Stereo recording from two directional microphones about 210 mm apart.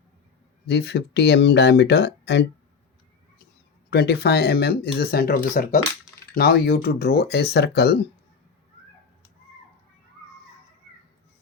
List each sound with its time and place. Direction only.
0.7 s speech: 55° left (ahead or behind)
3.8 s speech: 50° left (ahead or behind)